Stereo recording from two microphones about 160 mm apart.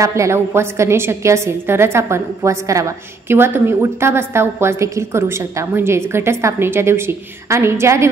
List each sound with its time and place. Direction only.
0.0 s a woman's voice: 20° right (ahead or behind)